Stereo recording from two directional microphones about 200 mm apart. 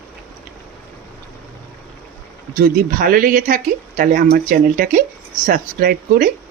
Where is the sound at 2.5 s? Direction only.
45° right (ahead or behind).